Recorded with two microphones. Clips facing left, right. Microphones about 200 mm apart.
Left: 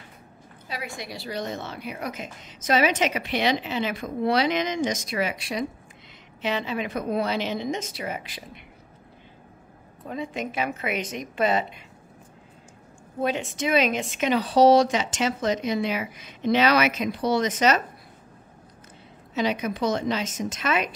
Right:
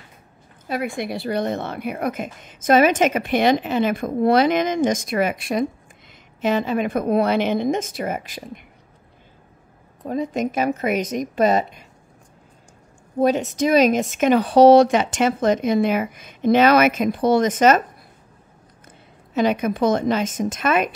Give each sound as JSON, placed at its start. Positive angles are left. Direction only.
{"t": 0.7, "sound": "a woman's voice", "side_deg": -55}
{"t": 10.0, "sound": "a woman's voice", "side_deg": -40}
{"t": 13.2, "sound": "a woman's voice", "side_deg": -40}
{"t": 19.3, "sound": "a woman's voice", "side_deg": -50}